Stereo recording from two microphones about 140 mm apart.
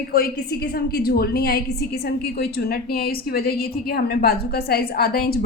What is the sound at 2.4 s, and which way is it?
A woman's voice, 90° left.